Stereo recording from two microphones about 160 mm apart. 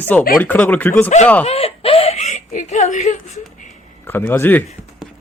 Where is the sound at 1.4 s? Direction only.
40° left (ahead or behind).